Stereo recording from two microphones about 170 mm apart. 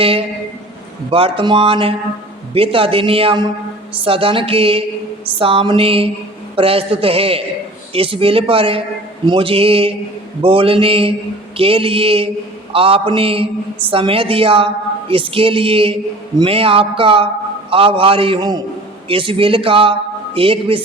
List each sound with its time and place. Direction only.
0.0 s a woman's voice: 35° right (ahead or behind)